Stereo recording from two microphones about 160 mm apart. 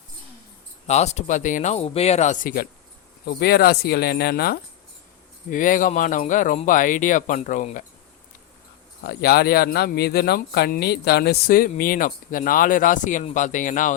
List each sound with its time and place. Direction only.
0.9 s speech: 45° left (ahead or behind); by 2.6 s 60° left (ahead or behind)
3.2 s speech: 80° left
5.5 s speech: 55° left (ahead or behind)
9.0 s speech: 80° left; by 13.9 s 55° left (ahead or behind)